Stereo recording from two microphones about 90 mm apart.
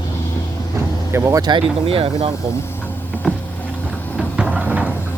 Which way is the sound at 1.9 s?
90° right.